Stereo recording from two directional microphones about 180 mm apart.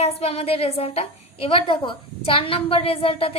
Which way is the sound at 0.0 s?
35° left (ahead or behind).